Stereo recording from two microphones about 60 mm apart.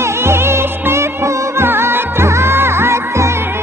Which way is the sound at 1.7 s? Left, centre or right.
Right.